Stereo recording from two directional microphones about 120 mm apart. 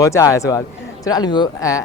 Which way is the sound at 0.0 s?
25° left (ahead or behind).